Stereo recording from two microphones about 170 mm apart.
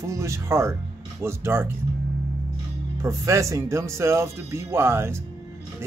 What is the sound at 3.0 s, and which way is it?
Speech, 20° right (ahead or behind).